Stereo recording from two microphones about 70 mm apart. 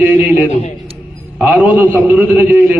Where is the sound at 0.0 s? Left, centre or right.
Right.